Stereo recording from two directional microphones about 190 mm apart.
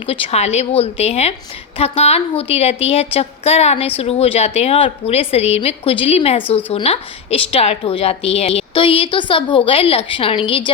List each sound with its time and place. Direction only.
0.1 s a woman's voice: 35° left (ahead or behind)